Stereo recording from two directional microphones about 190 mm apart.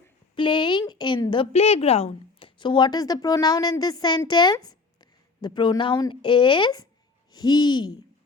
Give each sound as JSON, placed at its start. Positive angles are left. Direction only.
{"t": 0.3, "sound": "a woman's voice", "side_deg": 25}